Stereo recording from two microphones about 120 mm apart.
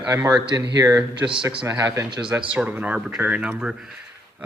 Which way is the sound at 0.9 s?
10° right (ahead or behind).